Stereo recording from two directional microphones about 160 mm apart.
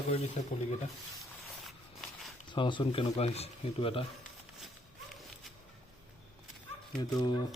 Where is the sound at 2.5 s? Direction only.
30° left (ahead or behind).